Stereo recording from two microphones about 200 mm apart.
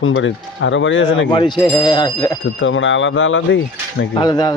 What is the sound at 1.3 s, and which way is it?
Speech, 20° left (ahead or behind).